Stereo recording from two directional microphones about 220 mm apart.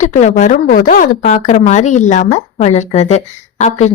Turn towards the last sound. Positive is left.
turn(degrees=30)  # may be behind; listen again after turning